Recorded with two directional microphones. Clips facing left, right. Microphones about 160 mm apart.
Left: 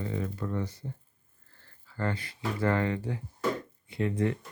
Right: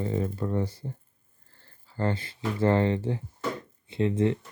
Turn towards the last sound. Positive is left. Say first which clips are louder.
# right 4 dB
turn(degrees=-25)  # may be behind; listen again after turning